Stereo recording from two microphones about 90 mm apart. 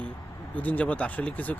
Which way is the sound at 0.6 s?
15° left (ahead or behind).